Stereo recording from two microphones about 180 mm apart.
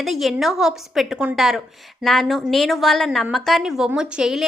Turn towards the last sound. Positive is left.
turn(degrees=0)  # may be behind; listen again after turning